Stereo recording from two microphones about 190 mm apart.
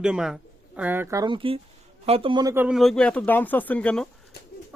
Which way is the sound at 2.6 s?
Centre (ahead or behind).